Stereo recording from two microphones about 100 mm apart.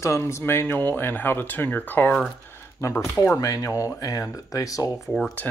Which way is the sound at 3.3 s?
35° left (ahead or behind).